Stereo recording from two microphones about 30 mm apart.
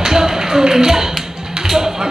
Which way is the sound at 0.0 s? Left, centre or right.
Centre.